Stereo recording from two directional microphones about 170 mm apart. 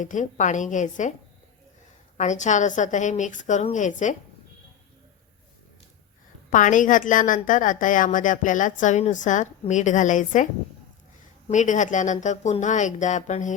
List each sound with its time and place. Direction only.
0.0 s a woman's voice: 45° left (ahead or behind)
2.1 s a woman's voice: 45° left (ahead or behind)
6.5 s a woman's voice: 50° left (ahead or behind)